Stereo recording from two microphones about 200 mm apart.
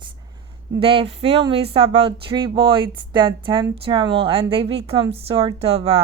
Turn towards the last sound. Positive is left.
turn(degrees=-30)  # may be behind; listen again after turning